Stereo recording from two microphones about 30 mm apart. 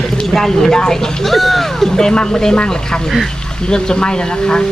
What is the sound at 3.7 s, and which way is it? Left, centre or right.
Speech, left.